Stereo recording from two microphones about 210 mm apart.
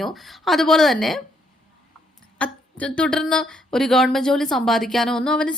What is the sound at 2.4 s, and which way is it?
Speech, 5° left (ahead or behind).